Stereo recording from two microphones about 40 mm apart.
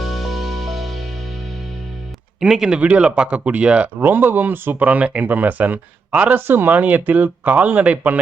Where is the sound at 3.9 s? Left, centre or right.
Right.